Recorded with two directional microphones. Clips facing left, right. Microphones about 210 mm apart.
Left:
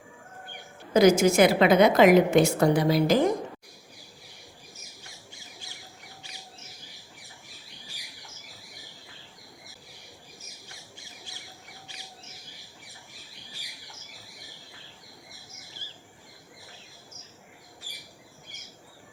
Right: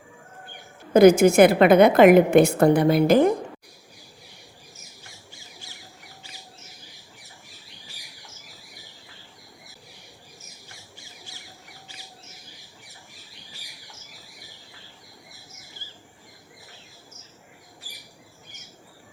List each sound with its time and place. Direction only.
0.9 s a woman's voice: 55° right (ahead or behind)